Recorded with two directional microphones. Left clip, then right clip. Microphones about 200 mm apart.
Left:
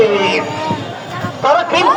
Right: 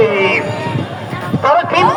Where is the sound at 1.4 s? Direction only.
15° left (ahead or behind).